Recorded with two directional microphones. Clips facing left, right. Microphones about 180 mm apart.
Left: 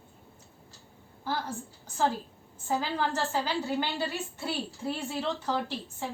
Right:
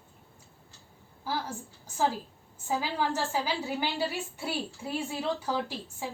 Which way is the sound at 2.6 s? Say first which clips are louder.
Even; 10° right (ahead or behind).